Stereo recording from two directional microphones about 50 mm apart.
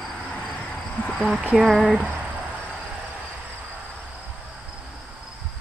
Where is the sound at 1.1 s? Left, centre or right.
Centre.